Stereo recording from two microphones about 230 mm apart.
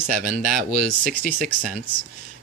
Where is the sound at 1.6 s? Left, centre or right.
Right.